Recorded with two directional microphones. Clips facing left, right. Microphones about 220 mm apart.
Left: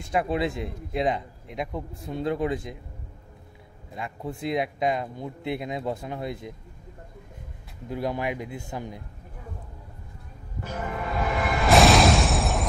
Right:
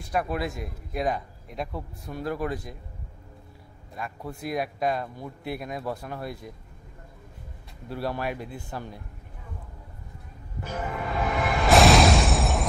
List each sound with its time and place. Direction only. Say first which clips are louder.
0.1 s a man's voice: left 3 dB; 25° left (ahead or behind)
3.9 s a man's voice: left 2 dB; 20° left (ahead or behind)
7.9 s speech: left 2 dB; 15° left (ahead or behind)
11.1 s music: even; centre (ahead or behind)